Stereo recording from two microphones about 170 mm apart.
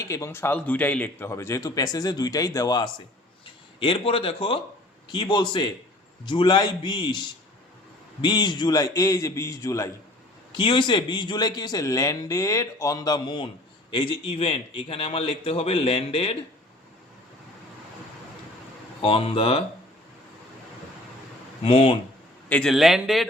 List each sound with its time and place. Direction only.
0.0 s a man's voice: 15° left (ahead or behind); by 16.4 s 35° left (ahead or behind)
19.0 s a man's voice: 30° left (ahead or behind)
21.6 s a man's voice: 35° left (ahead or behind)
22.4 s a man's voice: 5° left (ahead or behind)